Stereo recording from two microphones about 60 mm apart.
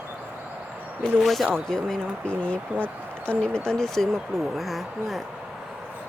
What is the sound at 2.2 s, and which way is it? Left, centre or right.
Speech, left.